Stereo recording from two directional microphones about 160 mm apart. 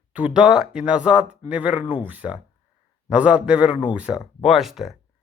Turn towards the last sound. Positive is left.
turn(degrees=0)  # may be behind; listen again after turning